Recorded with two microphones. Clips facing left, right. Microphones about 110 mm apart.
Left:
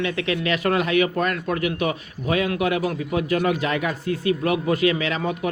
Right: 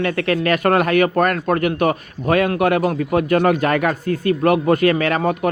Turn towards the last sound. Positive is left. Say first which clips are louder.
# right 6 dB
turn(degrees=-55)  # may be behind; listen again after turning